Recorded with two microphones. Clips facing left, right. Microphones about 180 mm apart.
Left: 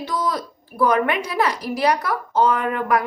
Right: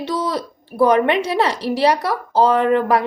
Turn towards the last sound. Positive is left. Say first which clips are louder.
# right 6 dB
turn(degrees=-30)  # may be behind; listen again after turning